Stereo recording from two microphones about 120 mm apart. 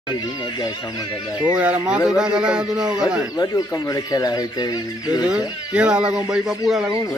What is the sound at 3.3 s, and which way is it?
Speech, 30° left (ahead or behind).